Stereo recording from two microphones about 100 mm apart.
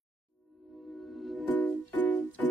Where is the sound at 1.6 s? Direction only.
15° left (ahead or behind).